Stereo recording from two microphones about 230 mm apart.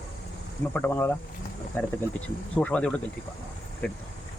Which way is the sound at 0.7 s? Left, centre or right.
Centre.